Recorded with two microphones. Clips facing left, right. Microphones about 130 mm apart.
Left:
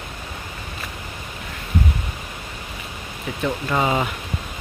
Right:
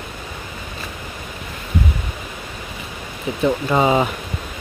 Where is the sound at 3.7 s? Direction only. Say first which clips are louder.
Right 4 dB; 20° right (ahead or behind).